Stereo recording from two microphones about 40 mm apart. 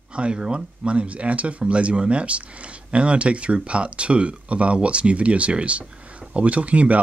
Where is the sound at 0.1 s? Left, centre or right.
Right.